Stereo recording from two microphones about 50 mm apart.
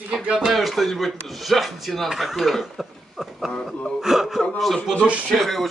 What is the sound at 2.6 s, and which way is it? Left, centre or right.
Cough, centre.